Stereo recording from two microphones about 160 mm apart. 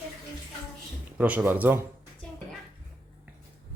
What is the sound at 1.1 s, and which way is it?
Speech, 10° right (ahead or behind).